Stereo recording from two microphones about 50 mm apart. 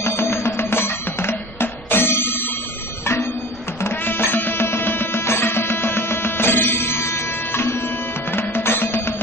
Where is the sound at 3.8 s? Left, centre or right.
Left.